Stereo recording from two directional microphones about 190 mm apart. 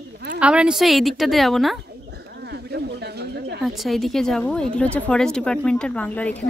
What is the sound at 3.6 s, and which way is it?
Speech, centre (ahead or behind).